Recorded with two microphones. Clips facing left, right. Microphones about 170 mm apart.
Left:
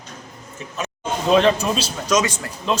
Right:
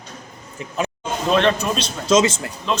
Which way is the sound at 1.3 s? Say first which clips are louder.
Left 2 dB; 5° left (ahead or behind).